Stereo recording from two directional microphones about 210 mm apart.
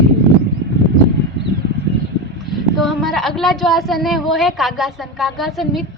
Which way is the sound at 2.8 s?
Centre (ahead or behind).